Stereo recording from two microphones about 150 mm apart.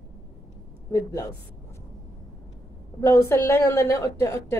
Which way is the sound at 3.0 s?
15° left (ahead or behind).